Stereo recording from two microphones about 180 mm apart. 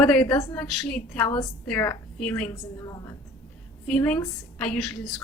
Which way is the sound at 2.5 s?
20° left (ahead or behind).